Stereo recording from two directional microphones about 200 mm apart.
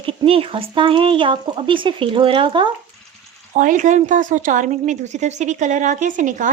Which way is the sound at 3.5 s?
40° right (ahead or behind).